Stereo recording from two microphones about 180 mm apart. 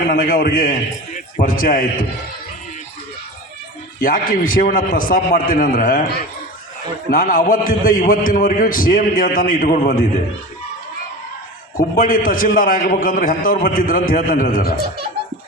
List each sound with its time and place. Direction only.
0.1 s a man's voice: 50° left (ahead or behind)
4.0 s a man's voice: 50° left (ahead or behind)
7.1 s a man's voice: 50° left (ahead or behind)
11.8 s a man's voice: 50° left (ahead or behind)